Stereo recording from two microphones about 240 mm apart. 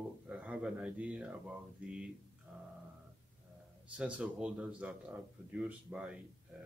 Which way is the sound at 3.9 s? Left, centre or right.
Centre.